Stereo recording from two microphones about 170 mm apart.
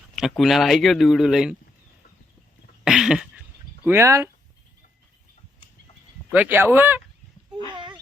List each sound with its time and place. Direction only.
0.2 s speech: centre (ahead or behind)
2.8 s cough: 5° right (ahead or behind)
3.8 s speech: 15° right (ahead or behind)
6.3 s speech: 10° right (ahead or behind)
7.7 s a sound: 30° right (ahead or behind)